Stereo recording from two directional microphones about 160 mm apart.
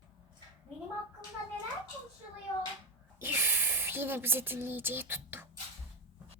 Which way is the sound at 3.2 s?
15° right (ahead or behind).